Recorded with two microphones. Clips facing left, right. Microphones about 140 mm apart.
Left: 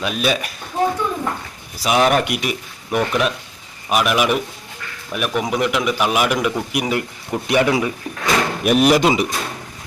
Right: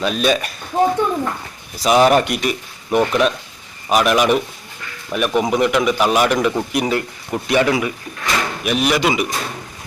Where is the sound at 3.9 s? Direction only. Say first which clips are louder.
Right 3 dB; 5° left (ahead or behind); by 7.9 s 25° left (ahead or behind).